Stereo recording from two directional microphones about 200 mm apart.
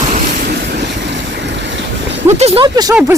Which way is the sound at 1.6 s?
65° right (ahead or behind).